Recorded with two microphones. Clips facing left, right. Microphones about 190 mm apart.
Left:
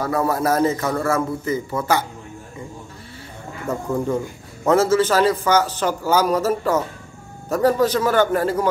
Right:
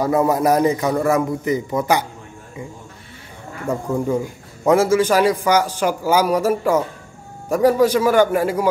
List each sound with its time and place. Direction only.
0.0 s a man's voice: 20° right (ahead or behind)
3.6 s a man's voice: 10° right (ahead or behind)